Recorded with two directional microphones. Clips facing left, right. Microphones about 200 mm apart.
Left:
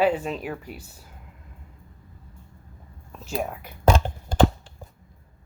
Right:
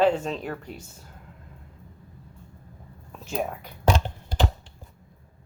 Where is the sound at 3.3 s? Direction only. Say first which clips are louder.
Even; centre (ahead or behind).